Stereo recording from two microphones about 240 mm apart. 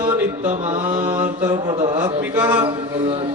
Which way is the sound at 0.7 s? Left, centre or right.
Centre.